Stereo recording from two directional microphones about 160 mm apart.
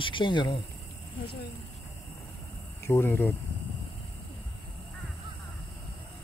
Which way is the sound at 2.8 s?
15° left (ahead or behind).